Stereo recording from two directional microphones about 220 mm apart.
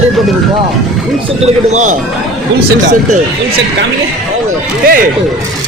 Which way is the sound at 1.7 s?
35° right (ahead or behind).